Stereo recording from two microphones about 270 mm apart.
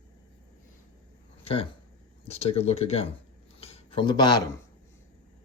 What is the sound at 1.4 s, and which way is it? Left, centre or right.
Speech, centre.